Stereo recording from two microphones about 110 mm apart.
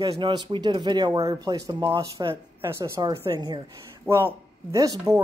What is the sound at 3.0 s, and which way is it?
Speech, 40° right (ahead or behind).